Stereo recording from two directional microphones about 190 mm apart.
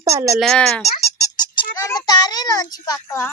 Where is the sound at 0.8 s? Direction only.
35° left (ahead or behind).